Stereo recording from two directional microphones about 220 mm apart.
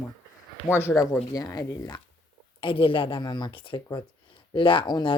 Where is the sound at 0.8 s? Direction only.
10° left (ahead or behind).